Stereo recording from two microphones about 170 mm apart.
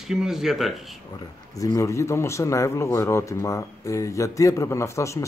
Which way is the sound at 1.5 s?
20° left (ahead or behind).